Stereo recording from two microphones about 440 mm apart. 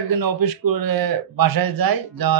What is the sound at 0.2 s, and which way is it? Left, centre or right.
Speech, right.